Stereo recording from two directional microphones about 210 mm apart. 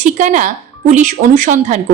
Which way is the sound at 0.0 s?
35° right (ahead or behind).